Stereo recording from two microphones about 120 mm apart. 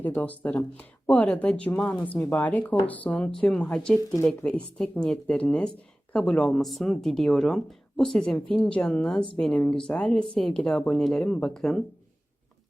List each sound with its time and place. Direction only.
0.0 s speech: 15° left (ahead or behind)